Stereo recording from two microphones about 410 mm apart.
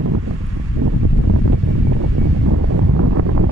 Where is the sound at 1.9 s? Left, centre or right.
Right.